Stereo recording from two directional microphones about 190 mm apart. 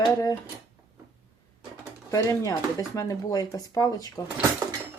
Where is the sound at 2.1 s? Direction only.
15° left (ahead or behind).